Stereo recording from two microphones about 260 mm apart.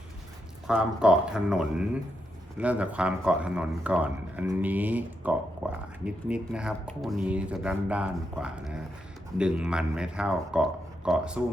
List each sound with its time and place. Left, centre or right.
0.7 s speech: centre
5.6 s a sound: centre
6.1 s speech: centre